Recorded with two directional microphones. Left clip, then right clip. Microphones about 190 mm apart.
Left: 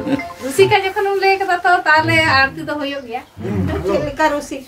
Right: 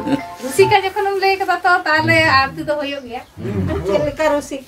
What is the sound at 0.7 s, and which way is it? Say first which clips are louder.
Music: even; 15° right (ahead or behind).